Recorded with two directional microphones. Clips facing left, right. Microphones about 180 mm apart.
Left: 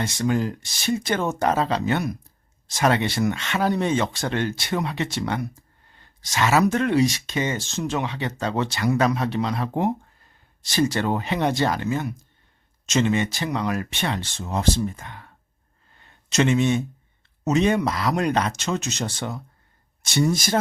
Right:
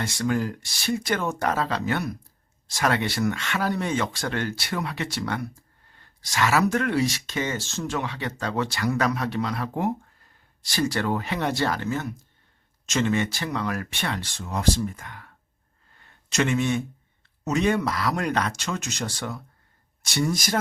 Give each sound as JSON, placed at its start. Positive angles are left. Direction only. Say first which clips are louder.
{"t": 0.0, "sound": "speech", "louder": "left 2 dB", "side_deg": 20}
{"t": 16.0, "sound": "a sound", "louder": "left 3 dB", "side_deg": 25}
{"t": 17.4, "sound": "speech", "louder": "left 3 dB", "side_deg": 20}